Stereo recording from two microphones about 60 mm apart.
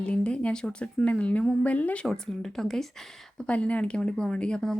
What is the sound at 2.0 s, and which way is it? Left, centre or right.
Speech, centre.